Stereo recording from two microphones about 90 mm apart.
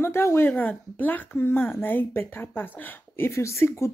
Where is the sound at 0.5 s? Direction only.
20° left (ahead or behind).